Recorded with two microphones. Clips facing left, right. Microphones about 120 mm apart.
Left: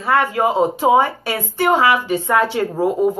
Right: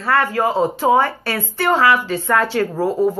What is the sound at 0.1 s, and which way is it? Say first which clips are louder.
Speech: left 1 dB; 15° left (ahead or behind).